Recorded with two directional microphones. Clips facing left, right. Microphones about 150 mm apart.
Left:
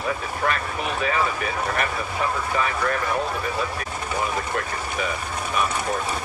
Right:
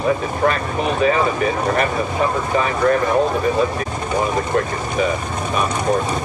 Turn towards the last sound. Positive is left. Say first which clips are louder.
# right 8 dB
turn(degrees=-25)  # may be behind; listen again after turning